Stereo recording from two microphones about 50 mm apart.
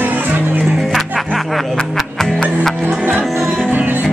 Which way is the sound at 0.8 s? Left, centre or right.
Centre.